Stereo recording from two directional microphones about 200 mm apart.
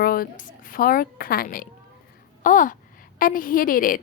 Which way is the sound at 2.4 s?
40° left (ahead or behind).